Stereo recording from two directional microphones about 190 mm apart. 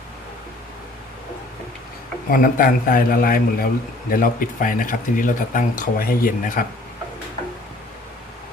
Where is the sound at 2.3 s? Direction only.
45° left (ahead or behind).